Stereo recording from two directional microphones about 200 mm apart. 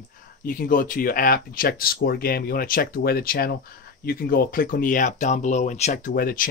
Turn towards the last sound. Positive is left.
turn(degrees=45)  # may be behind; listen again after turning